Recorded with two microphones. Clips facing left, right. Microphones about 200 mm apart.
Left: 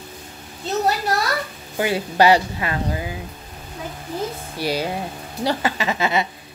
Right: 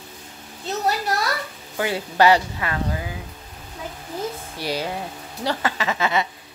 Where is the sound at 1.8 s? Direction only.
15° left (ahead or behind).